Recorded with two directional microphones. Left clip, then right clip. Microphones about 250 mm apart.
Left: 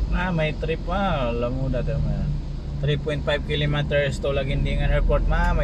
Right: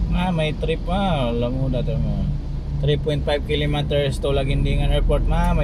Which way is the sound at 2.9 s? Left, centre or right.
Centre.